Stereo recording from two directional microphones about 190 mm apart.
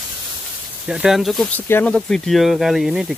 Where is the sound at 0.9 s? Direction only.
5° right (ahead or behind).